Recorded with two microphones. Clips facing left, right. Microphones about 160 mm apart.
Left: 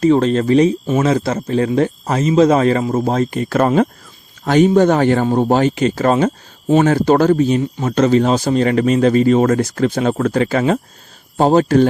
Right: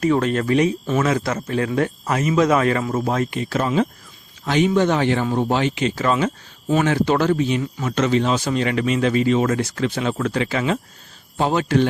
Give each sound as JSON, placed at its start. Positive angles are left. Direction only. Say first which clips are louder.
{"t": 0.0, "sound": "speech", "louder": "left 6 dB", "side_deg": 30}